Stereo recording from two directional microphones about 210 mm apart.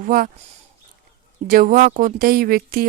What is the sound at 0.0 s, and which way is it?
Speech, 40° right (ahead or behind).